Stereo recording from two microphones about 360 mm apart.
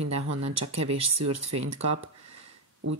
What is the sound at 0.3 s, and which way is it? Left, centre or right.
Speech, right.